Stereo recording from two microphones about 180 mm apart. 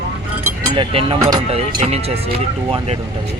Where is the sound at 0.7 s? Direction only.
30° right (ahead or behind).